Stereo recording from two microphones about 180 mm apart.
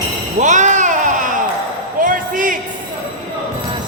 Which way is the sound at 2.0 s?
50° right (ahead or behind).